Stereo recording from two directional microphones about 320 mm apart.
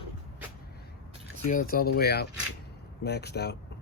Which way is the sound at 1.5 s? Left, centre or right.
Left.